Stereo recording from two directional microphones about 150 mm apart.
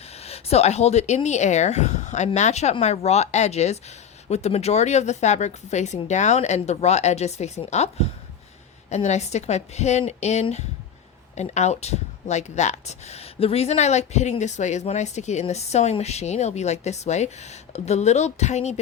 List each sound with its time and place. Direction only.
0.2 s speech: 45° left (ahead or behind)